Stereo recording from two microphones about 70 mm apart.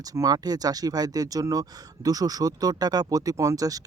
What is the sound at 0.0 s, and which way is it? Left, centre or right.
Speech, right.